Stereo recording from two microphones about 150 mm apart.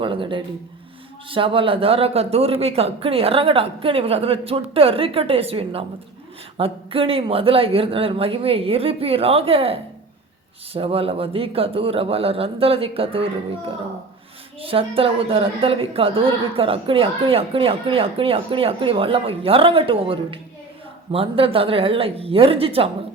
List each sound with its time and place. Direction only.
0.0 s a woman's voice: 35° right (ahead or behind)
10.8 s a woman's voice: 40° right (ahead or behind)
14.6 s a woman's voice: 40° right (ahead or behind)